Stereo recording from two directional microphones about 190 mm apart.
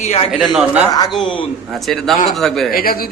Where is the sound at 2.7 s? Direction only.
50° left (ahead or behind).